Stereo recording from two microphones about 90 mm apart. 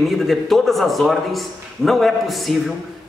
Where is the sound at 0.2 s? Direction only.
Centre (ahead or behind).